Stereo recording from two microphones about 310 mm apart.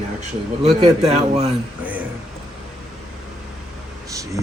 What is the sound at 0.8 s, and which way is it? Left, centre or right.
Speech, centre.